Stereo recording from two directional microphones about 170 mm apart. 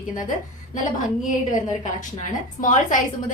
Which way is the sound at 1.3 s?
50° left (ahead or behind).